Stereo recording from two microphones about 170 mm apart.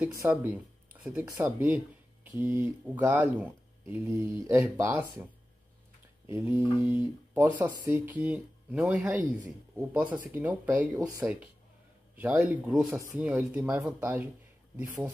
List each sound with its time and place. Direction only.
0.0 s speech: 20° right (ahead or behind)
6.2 s speech: 15° right (ahead or behind)